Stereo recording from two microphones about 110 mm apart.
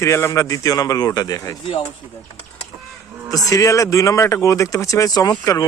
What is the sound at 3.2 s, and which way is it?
Speech, 35° left (ahead or behind).